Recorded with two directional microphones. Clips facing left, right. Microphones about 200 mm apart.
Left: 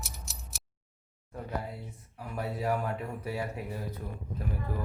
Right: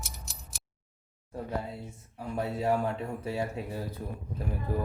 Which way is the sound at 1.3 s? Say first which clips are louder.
Right 2 dB; 25° right (ahead or behind).